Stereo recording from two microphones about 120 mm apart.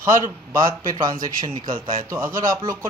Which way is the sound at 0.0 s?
25° right (ahead or behind).